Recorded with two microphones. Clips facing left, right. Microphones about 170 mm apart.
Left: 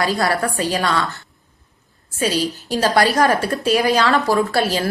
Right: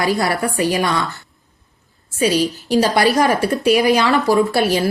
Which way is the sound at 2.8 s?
20° right (ahead or behind).